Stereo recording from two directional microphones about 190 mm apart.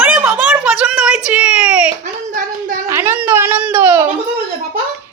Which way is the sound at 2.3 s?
45° right (ahead or behind).